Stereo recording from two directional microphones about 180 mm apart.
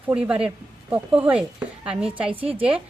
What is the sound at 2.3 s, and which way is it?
Speech, 30° right (ahead or behind).